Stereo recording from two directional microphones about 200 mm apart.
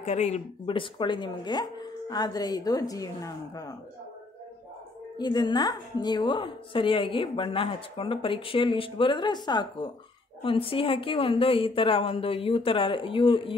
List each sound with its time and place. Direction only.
0.0 s a woman's voice: 35° left (ahead or behind); by 3.7 s 15° left (ahead or behind)
5.1 s a woman's voice: 20° left (ahead or behind)